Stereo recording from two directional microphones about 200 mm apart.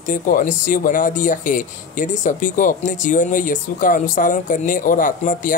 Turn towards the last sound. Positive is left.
turn(degrees=40)  # may be behind; listen again after turning